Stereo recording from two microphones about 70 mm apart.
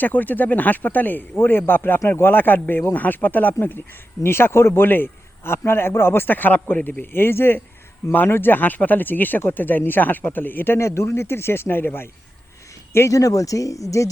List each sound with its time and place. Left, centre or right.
0.0 s speech: left
10.8 s speech: left
13.1 s speech: left